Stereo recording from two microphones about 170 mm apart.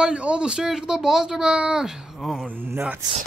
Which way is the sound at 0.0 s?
5° right (ahead or behind).